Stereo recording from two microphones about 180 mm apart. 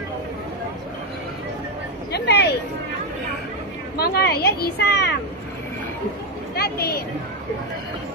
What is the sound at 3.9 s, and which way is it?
Speech, 60° left (ahead or behind).